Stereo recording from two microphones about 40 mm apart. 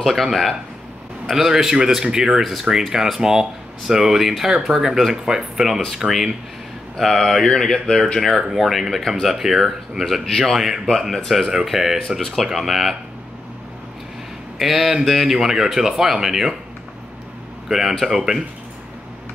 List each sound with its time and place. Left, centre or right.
0.0 s speech: centre
7.0 s speech: centre
8.2 s speech: centre
11.6 s speech: centre
12.2 s speech: centre
12.4 s speech: centre
14.6 s speech: centre
17.6 s speech: centre